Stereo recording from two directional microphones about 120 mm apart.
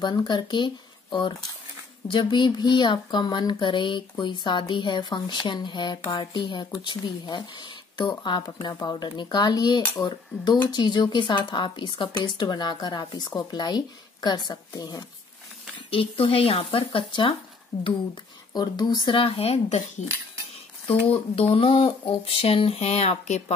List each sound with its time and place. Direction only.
0.0 s a woman's voice: 40° left (ahead or behind)
2.0 s a woman's voice: 40° left (ahead or behind)
15.9 s speech: 45° left (ahead or behind)
18.5 s speech: 35° left (ahead or behind); by 20.1 s 65° left (ahead or behind)
20.8 s speech: 55° left (ahead or behind)